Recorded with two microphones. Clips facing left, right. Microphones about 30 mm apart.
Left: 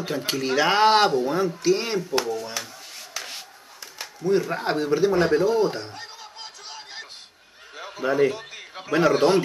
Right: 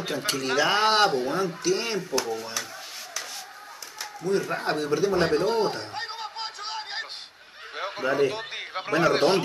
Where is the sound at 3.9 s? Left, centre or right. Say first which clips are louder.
Left 4 dB; centre.